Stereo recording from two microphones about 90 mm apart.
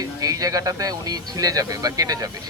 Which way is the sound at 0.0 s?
45° right (ahead or behind).